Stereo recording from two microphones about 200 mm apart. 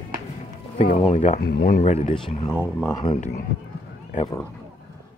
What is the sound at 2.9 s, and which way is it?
Speech, 20° left (ahead or behind).